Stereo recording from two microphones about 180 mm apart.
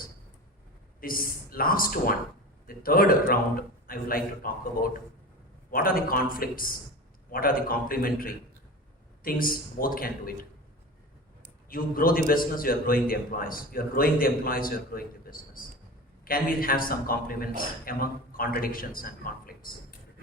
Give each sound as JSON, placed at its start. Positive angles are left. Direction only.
{"t": 1.0, "sound": "a man's voice", "side_deg": 50}
{"t": 11.7, "sound": "a man's voice", "side_deg": 55}